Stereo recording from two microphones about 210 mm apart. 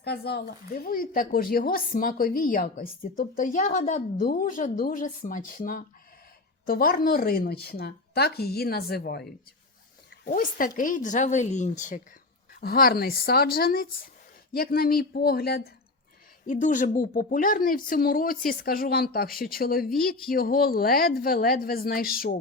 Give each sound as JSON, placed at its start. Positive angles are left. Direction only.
{"t": 0.0, "sound": "a woman's voice", "side_deg": 50}
{"t": 10.2, "sound": "a woman's voice", "side_deg": 40}